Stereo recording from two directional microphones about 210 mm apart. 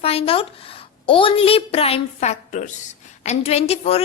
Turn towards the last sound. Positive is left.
turn(degrees=30)  # may be behind; listen again after turning